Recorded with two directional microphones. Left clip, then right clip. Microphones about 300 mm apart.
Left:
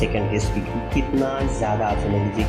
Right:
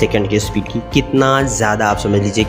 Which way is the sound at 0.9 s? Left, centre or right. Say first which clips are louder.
Right 10 dB; right.